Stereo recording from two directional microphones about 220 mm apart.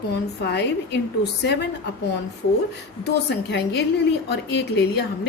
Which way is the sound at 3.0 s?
50° left (ahead or behind).